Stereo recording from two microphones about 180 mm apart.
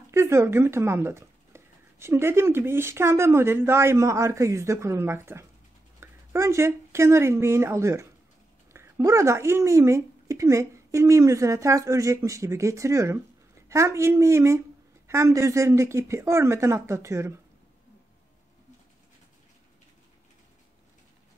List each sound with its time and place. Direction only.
0.1 s speech: 15° right (ahead or behind)